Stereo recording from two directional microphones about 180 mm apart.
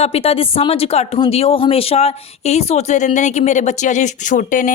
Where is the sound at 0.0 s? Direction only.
35° left (ahead or behind).